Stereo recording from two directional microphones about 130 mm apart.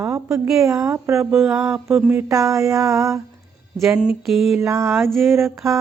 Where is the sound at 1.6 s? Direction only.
20° right (ahead or behind).